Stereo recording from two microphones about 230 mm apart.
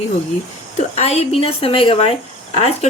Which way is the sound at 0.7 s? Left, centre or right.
Left.